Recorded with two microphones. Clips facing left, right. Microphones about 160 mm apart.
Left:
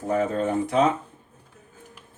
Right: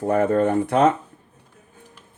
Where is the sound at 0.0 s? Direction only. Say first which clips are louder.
Right 5 dB; 60° right (ahead or behind).